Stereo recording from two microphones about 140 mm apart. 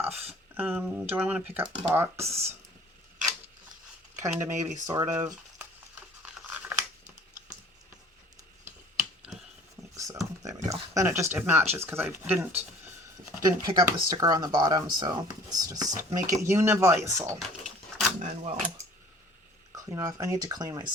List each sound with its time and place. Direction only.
0.0 s a sound: 15° right (ahead or behind)
0.5 s speech: 15° right (ahead or behind)
4.2 s speech: 15° right (ahead or behind)
4.5 s speech: 60° right (ahead or behind)
4.9 s speech: 20° right (ahead or behind)
6.2 s tearing: 10° right (ahead or behind)
9.9 s speech: 25° right (ahead or behind)
13.4 s speech: 30° right (ahead or behind)
18.2 s speech: 55° right (ahead or behind)
19.7 s speech: 25° right (ahead or behind)